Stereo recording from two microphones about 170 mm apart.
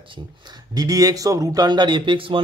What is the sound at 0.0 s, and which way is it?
Speech, 30° right (ahead or behind).